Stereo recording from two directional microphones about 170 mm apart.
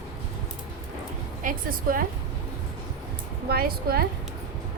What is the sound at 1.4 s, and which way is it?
Speech, 55° right (ahead or behind).